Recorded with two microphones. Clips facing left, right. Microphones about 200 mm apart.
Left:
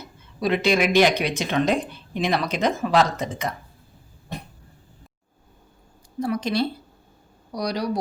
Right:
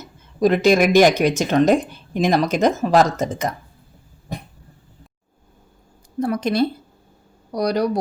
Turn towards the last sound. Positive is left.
turn(degrees=-50)  # may be behind; listen again after turning